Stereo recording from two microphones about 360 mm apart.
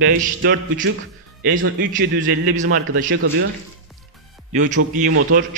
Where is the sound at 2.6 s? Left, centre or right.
Right.